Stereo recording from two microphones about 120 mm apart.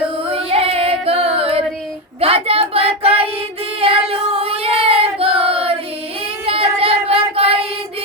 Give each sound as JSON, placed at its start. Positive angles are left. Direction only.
{"t": 0.3, "sound": "female singing", "side_deg": -55}
{"t": 2.2, "sound": "child singing", "side_deg": -55}